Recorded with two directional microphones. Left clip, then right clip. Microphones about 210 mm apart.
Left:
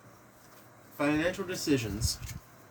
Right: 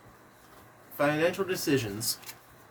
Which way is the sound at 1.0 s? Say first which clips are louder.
Right 3 dB; 35° right (ahead or behind).